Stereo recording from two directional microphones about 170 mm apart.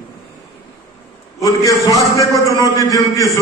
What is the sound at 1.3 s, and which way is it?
A man's voice, 20° left (ahead or behind).